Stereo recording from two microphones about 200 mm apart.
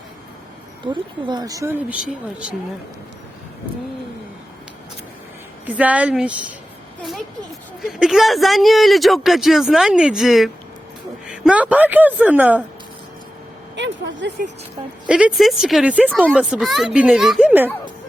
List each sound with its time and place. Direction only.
0.9 s speech: 20° right (ahead or behind); by 2.6 s 5° right (ahead or behind)
5.6 s a man's voice: 5° right (ahead or behind)
13.7 s speech: 60° right (ahead or behind)
15.0 s a man's voice: 5° right (ahead or behind)